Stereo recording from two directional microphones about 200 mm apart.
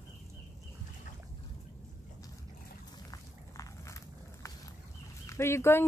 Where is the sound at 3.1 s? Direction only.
15° left (ahead or behind).